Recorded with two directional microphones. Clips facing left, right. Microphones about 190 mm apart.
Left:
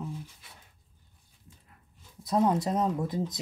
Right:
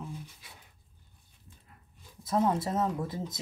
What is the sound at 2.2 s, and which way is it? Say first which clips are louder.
Speech: left 2 dB; 15° left (ahead or behind).